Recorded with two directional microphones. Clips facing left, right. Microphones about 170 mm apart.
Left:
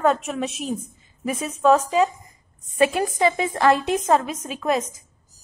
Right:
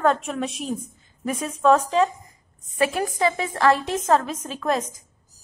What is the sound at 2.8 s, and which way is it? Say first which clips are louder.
A woman's voice: left 3 dB; 20° left (ahead or behind).